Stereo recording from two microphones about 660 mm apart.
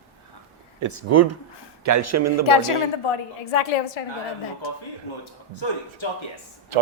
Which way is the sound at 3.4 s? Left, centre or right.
Left.